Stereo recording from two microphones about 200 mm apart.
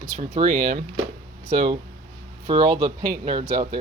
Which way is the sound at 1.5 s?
25° right (ahead or behind).